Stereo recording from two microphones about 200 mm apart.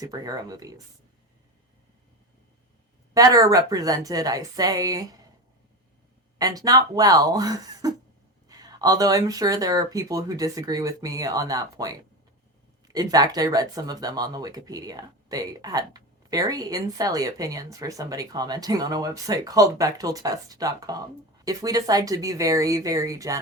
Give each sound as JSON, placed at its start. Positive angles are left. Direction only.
{"t": 0.0, "sound": "speech", "side_deg": -20}
{"t": 3.2, "sound": "speech", "side_deg": -20}
{"t": 6.4, "sound": "speech", "side_deg": -20}